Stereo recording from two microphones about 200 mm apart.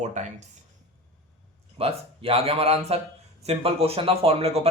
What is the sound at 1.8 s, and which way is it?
Speech, 30° right (ahead or behind).